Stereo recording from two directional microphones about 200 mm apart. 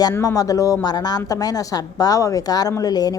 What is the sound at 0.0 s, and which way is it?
Speech, 15° left (ahead or behind).